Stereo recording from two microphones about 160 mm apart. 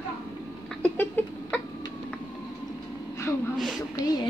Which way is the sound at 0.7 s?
10° left (ahead or behind).